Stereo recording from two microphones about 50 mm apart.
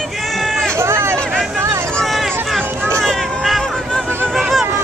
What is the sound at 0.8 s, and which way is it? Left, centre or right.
Hubbub, right.